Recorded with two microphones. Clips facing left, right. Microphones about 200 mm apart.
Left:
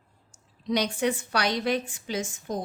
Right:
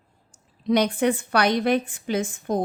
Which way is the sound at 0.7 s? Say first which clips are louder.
Right 5 dB; 55° right (ahead or behind).